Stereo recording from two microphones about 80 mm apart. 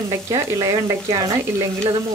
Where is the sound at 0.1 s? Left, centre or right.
Right.